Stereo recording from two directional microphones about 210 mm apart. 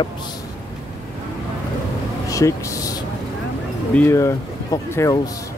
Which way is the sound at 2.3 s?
15° left (ahead or behind).